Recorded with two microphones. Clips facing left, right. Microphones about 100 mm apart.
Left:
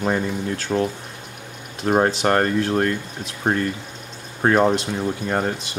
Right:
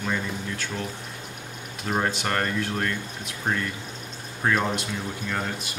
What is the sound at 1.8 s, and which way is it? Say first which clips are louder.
Speech: left 8 dB; 40° left (ahead or behind).